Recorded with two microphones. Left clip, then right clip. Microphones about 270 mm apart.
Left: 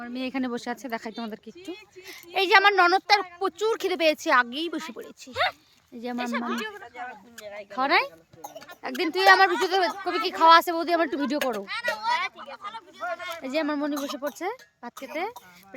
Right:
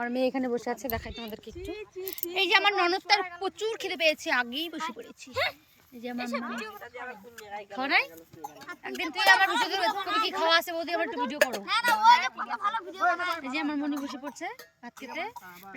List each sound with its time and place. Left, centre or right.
0.0 s speech: centre
0.3 s speech: centre
7.7 s speech: centre
11.5 s speech: right
13.4 s speech: centre